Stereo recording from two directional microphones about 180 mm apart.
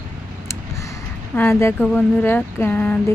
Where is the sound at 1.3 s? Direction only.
10° left (ahead or behind).